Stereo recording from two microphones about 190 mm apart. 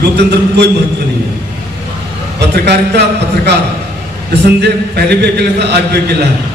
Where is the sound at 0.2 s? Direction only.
65° right (ahead or behind).